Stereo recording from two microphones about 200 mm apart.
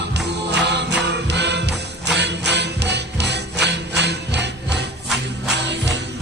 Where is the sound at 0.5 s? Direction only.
60° right (ahead or behind).